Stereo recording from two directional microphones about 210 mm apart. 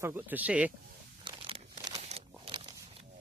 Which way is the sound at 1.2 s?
25° right (ahead or behind).